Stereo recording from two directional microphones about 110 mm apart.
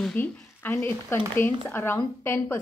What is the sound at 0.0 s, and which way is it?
Speech, 10° left (ahead or behind).